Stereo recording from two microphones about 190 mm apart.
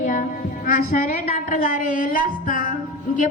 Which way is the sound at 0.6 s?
40° left (ahead or behind).